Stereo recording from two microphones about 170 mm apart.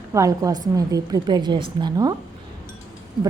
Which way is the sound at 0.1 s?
20° right (ahead or behind).